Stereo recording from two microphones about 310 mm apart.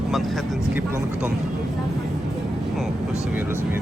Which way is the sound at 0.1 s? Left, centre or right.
Centre.